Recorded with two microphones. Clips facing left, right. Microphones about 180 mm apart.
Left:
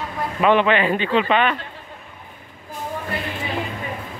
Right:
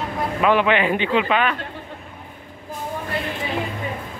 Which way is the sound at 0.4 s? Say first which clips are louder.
Left 1 dB; 5° right (ahead or behind).